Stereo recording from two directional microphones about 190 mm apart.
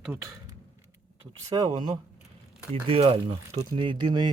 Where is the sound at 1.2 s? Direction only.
20° right (ahead or behind).